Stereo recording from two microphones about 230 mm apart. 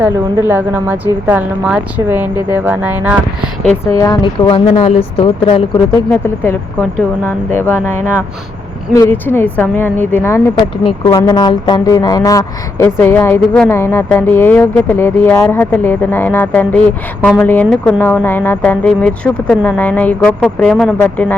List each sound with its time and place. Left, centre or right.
0.0 s a woman's voice: centre
3.8 s speech: centre
6.1 s speech: centre
8.9 s speech: centre